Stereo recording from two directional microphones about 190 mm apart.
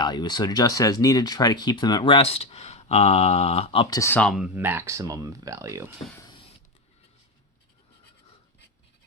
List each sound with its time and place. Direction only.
0.0 s speech: 20° left (ahead or behind); by 5.9 s 15° right (ahead or behind)